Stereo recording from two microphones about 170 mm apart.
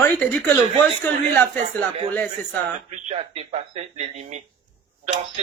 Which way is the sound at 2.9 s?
40° right (ahead or behind).